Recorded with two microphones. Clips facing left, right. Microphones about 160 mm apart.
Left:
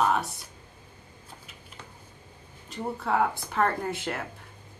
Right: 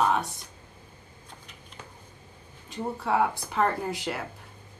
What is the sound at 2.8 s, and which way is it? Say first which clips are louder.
Speech: right 1 dB; 10° right (ahead or behind).